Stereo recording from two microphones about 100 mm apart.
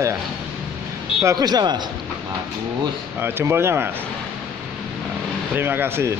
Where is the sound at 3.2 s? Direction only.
25° right (ahead or behind).